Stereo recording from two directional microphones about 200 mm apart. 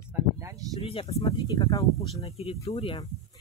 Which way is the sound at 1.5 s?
15° left (ahead or behind).